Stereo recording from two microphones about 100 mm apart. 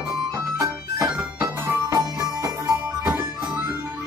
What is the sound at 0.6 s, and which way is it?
Organ, 35° right (ahead or behind).